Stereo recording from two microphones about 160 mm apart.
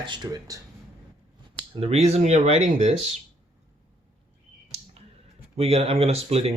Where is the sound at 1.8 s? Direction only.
40° right (ahead or behind).